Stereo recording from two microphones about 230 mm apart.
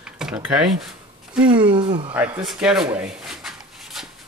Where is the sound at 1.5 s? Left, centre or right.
Centre.